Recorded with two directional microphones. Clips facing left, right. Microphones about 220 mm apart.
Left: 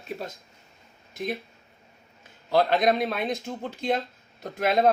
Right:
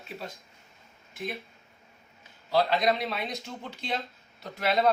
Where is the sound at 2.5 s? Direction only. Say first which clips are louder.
Left 3 dB; 50° left (ahead or behind).